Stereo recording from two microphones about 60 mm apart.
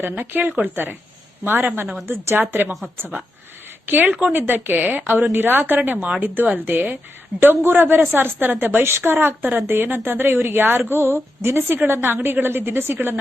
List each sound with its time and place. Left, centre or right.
0.0 s a woman's voice: right